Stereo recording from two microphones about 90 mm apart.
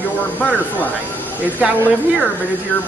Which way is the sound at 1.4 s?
15° right (ahead or behind).